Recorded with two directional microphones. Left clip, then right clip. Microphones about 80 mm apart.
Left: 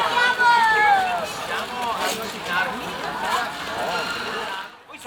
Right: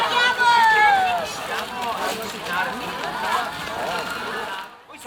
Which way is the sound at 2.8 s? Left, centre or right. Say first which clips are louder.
Right 1 dB; right.